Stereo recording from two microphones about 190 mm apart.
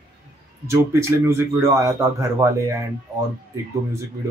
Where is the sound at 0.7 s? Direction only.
15° right (ahead or behind).